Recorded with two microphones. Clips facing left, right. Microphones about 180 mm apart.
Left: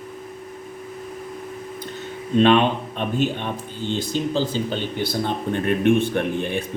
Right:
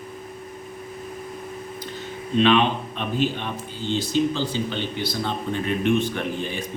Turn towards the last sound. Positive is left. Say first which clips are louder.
# left 4 dB
turn(degrees=55)  # may be behind; listen again after turning